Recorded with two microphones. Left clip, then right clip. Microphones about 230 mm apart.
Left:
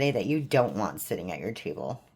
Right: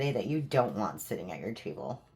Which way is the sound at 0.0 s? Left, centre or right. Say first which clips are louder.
Left 5 dB; left.